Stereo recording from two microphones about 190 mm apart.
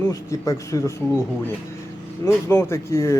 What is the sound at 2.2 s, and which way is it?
Speech, 15° left (ahead or behind).